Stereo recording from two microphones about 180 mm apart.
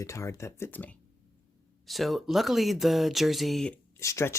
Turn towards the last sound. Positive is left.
turn(degrees=15)  # may be behind; listen again after turning